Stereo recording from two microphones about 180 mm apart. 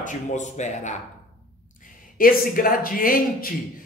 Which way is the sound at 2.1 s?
50° left (ahead or behind).